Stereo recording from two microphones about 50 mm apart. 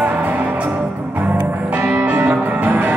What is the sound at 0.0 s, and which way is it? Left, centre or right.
Music, right.